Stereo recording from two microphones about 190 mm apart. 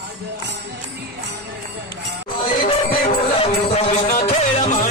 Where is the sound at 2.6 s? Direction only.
30° left (ahead or behind).